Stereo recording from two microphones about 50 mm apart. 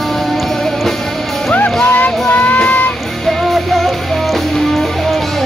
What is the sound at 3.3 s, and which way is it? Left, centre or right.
Music, centre.